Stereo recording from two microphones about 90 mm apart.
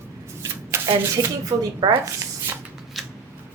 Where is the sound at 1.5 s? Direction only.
45° right (ahead or behind).